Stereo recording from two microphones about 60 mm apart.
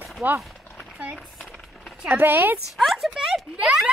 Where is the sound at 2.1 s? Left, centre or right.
Right.